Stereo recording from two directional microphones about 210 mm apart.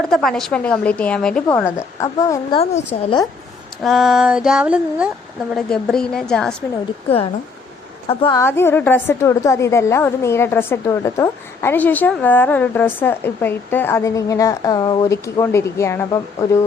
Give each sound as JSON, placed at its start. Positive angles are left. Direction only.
{"t": 0.1, "sound": "a woman's voice", "side_deg": 0}
{"t": 3.8, "sound": "a woman's voice", "side_deg": 0}
{"t": 8.2, "sound": "a woman's voice", "side_deg": 15}